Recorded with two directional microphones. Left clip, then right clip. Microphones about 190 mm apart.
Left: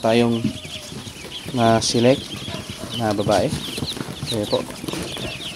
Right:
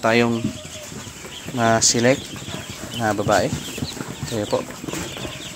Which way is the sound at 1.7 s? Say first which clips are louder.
Even; 30° left (ahead or behind).